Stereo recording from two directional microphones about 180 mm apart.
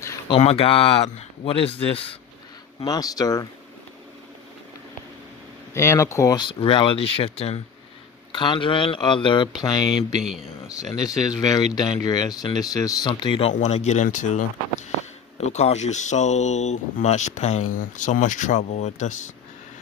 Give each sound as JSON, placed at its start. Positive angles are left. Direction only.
{"t": 0.3, "sound": "speech", "side_deg": 30}
{"t": 2.8, "sound": "speech", "side_deg": 20}
{"t": 5.7, "sound": "speech", "side_deg": 15}